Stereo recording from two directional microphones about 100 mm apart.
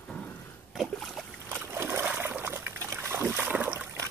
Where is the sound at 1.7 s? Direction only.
25° right (ahead or behind).